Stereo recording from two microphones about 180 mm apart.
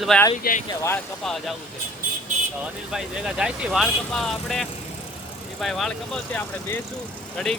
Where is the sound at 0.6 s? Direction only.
15° left (ahead or behind).